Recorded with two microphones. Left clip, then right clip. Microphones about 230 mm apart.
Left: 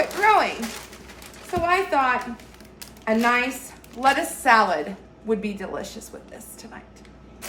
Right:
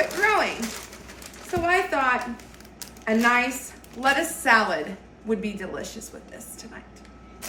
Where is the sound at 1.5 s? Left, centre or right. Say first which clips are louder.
Left 2 dB; centre.